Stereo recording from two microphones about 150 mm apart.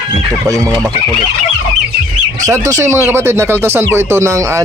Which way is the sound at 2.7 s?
20° right (ahead or behind).